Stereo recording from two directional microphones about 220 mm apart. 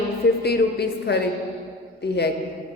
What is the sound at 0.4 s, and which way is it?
Speech, 50° left (ahead or behind).